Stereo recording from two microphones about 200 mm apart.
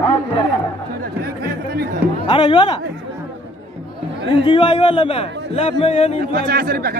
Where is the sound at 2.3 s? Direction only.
25° left (ahead or behind).